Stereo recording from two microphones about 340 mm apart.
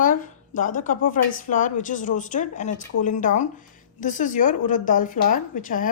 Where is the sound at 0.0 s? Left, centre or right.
Left.